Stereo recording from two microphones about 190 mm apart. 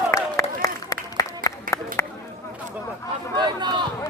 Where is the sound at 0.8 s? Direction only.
20° left (ahead or behind).